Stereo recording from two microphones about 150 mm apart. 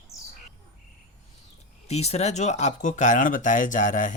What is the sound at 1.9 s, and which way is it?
Speech, 45° left (ahead or behind).